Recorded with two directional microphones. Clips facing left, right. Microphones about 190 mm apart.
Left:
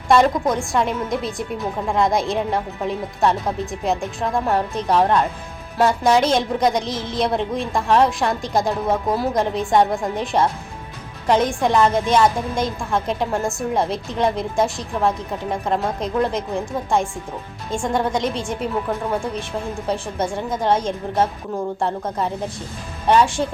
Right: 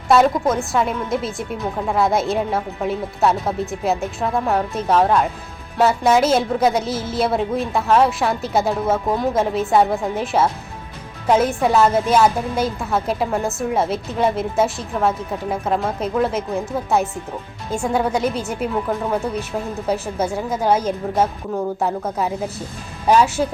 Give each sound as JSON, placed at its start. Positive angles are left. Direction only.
{"t": 0.1, "sound": "a woman's voice", "side_deg": -5}